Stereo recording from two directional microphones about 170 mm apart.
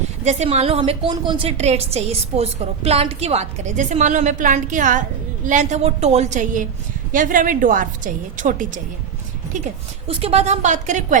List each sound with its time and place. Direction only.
0.3 s a woman's voice: 40° right (ahead or behind)
10.1 s a woman's voice: 35° right (ahead or behind)